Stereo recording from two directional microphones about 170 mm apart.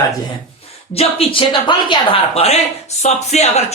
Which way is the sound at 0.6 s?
35° left (ahead or behind).